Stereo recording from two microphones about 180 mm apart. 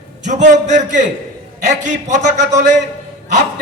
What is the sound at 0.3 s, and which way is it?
A man's voice, 40° right (ahead or behind).